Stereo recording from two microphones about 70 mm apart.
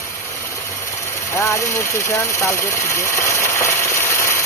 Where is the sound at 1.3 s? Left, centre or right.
Left.